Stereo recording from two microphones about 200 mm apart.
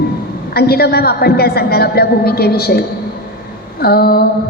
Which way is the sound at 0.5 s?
50° left (ahead or behind).